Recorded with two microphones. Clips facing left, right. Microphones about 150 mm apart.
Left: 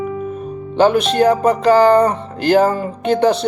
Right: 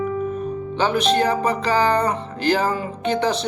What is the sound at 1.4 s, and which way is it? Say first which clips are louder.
Speech: left 8 dB; 45° left (ahead or behind).